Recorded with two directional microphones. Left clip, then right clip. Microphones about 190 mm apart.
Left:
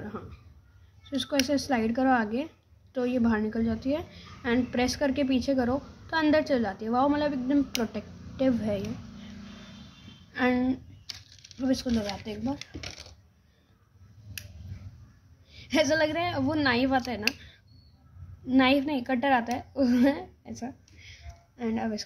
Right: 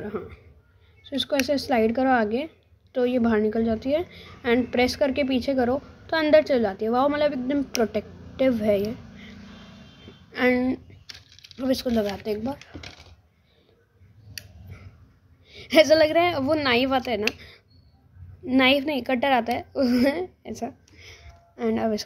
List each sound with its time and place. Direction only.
0.0 s a man's voice: 25° right (ahead or behind)
10.3 s a woman's voice: 40° right (ahead or behind)
15.4 s a woman's voice: 40° right (ahead or behind)
18.5 s a woman's voice: 35° right (ahead or behind)